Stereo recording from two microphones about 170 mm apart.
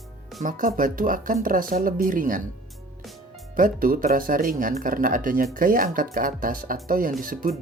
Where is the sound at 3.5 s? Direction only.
55° right (ahead or behind).